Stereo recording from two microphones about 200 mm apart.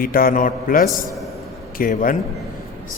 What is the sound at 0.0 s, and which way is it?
A man's voice, 45° left (ahead or behind).